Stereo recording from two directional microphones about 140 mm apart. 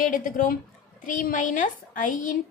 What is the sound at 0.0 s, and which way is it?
A woman's voice, 70° left (ahead or behind).